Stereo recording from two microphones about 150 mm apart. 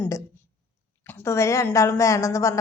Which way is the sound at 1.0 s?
20° left (ahead or behind).